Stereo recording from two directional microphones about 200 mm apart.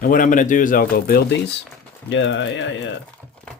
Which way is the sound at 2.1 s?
65° left (ahead or behind).